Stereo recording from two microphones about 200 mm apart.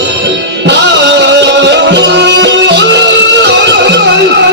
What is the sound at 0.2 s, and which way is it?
Music, 60° right (ahead or behind).